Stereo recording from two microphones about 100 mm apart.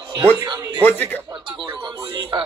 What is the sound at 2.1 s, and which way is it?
Speech, 55° right (ahead or behind).